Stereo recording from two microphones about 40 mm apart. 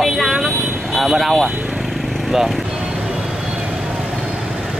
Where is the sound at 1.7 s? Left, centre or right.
Centre.